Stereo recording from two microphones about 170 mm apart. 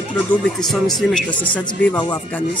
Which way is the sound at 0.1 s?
5° left (ahead or behind).